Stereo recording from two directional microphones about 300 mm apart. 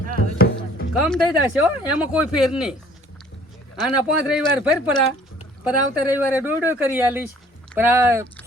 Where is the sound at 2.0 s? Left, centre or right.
Centre.